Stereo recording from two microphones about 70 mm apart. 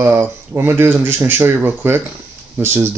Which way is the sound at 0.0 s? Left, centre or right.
Right.